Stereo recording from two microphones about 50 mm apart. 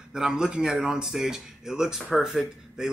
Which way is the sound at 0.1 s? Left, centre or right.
Centre.